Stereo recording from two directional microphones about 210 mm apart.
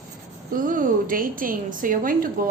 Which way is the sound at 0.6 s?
40° right (ahead or behind).